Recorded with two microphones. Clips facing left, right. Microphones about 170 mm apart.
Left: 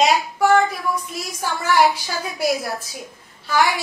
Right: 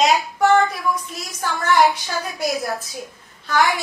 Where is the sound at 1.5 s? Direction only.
10° left (ahead or behind).